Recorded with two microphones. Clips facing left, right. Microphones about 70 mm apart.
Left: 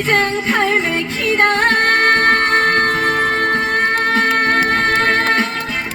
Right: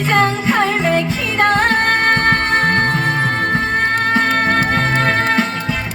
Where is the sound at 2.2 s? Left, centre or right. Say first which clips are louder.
Left 1 dB; left.